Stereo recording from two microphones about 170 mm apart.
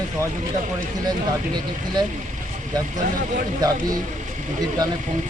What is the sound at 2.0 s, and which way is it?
Speech, 25° right (ahead or behind).